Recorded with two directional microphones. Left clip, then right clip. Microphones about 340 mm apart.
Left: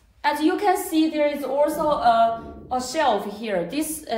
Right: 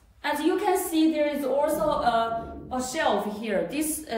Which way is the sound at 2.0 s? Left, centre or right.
Centre.